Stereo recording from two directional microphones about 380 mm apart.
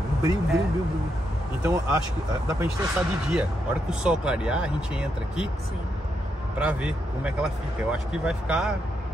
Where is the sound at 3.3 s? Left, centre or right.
Centre.